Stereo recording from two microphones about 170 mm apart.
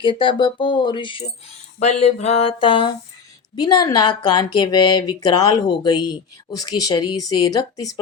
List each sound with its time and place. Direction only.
0.0 s speech: 30° left (ahead or behind)
1.8 s a sound: 40° left (ahead or behind)
3.5 s speech: 25° left (ahead or behind)